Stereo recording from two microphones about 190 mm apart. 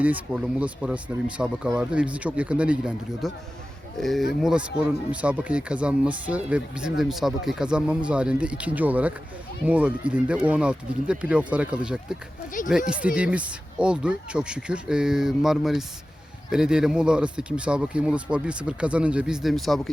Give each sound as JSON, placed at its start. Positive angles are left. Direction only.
{"t": 0.0, "sound": "speech", "side_deg": -10}
{"t": 12.6, "sound": "speech", "side_deg": 45}
{"t": 13.1, "sound": "speech", "side_deg": -5}